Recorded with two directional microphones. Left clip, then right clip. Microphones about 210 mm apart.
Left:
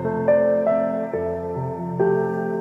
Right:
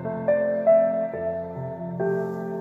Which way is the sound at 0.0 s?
50° left (ahead or behind).